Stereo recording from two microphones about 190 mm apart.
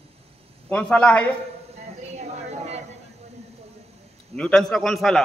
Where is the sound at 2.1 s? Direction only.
35° right (ahead or behind).